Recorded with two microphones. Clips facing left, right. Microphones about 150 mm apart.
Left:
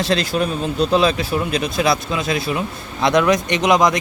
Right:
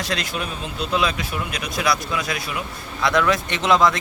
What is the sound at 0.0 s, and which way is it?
Speech, 30° left (ahead or behind).